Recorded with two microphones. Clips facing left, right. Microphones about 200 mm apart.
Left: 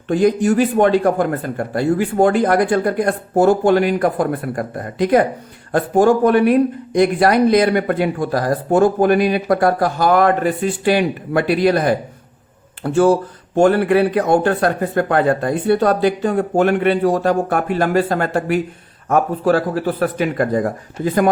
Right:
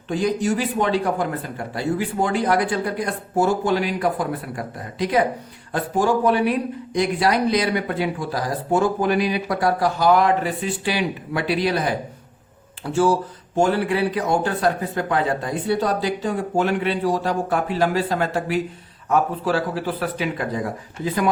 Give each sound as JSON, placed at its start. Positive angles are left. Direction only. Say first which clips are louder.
{"t": 0.1, "sound": "speech", "louder": "left 7 dB", "side_deg": 55}